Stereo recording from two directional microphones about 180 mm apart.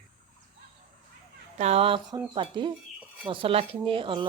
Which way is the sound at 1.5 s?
35° right (ahead or behind).